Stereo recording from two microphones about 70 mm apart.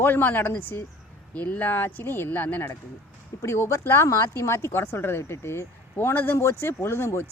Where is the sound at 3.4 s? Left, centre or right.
Left.